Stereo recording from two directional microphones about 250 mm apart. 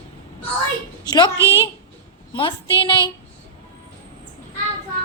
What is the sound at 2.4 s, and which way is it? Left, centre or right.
Speech, centre.